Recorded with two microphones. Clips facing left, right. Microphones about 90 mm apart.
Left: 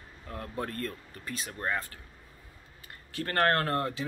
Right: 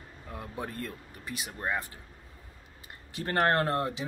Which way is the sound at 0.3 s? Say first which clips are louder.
Left 2 dB; 10° right (ahead or behind).